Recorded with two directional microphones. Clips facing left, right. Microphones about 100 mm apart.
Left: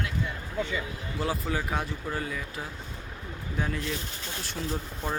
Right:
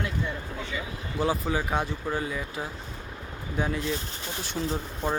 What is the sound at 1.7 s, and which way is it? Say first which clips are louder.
Speech: right 3 dB; 25° right (ahead or behind).